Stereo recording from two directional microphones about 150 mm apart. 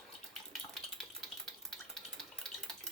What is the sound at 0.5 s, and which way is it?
Water, centre (ahead or behind).